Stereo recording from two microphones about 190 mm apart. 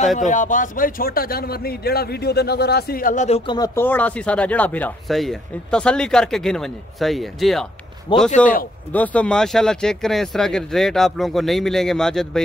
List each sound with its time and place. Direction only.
0.2 s a man's voice: 40° left (ahead or behind)
3.5 s speech: 15° left (ahead or behind); by 7.6 s centre (ahead or behind)
8.1 s a man's voice: 25° left (ahead or behind)
8.9 s speech: 5° left (ahead or behind)